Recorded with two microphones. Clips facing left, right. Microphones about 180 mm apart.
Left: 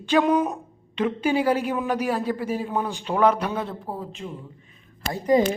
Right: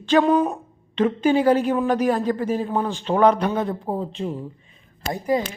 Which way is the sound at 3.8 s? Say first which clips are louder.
Right 7 dB; 30° right (ahead or behind).